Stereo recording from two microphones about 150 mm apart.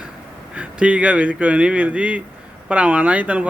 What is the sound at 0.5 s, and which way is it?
A man's voice, 10° right (ahead or behind).